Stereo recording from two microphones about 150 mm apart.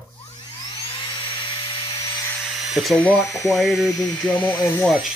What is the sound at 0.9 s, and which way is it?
Dental drill, 35° left (ahead or behind).